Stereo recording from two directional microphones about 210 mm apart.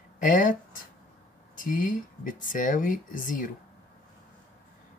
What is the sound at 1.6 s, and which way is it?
Speech, 40° left (ahead or behind).